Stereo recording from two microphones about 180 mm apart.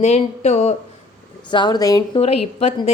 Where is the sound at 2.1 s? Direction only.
35° left (ahead or behind).